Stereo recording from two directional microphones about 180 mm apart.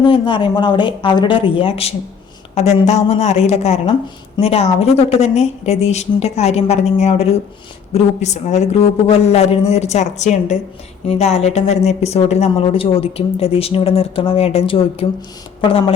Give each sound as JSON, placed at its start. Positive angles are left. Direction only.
{"t": 0.0, "sound": "a woman's voice", "side_deg": 25}